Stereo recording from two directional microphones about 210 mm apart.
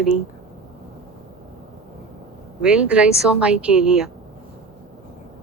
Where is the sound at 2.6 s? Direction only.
5° right (ahead or behind).